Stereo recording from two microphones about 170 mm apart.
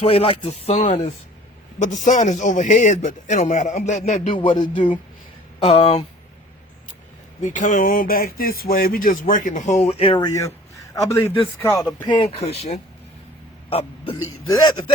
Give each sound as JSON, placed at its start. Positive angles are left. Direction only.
{"t": 0.0, "sound": "speech", "side_deg": 35}
{"t": 1.8, "sound": "speech", "side_deg": 45}
{"t": 4.4, "sound": "speech", "side_deg": 30}
{"t": 7.4, "sound": "speech", "side_deg": 50}
{"t": 12.0, "sound": "speech", "side_deg": 30}